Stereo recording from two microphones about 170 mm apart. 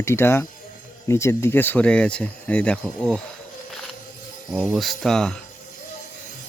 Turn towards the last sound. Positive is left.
turn(degrees=5)  # may be behind; listen again after turning